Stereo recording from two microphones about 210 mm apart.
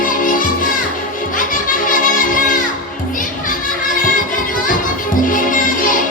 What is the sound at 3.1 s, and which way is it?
Children playing, 40° left (ahead or behind).